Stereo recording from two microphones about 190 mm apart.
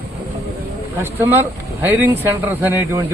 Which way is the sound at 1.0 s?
10° right (ahead or behind).